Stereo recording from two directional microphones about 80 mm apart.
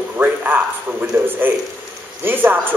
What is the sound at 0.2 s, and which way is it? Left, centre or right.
A man's voice, right.